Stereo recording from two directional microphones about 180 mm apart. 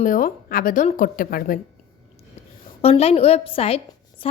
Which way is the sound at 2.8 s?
35° left (ahead or behind).